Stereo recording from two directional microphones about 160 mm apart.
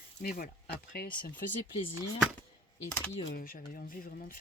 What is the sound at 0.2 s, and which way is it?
Speech, 65° left (ahead or behind).